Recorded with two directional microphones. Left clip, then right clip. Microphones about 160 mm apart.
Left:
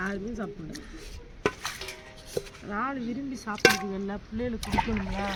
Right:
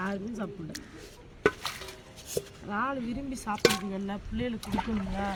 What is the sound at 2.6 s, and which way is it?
Speech, 20° right (ahead or behind).